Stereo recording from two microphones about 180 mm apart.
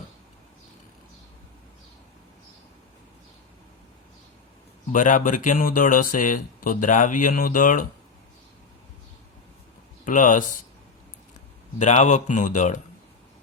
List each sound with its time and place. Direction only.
4.9 s speech: 45° left (ahead or behind)
10.1 s speech: 45° left (ahead or behind)
11.8 s speech: 40° left (ahead or behind)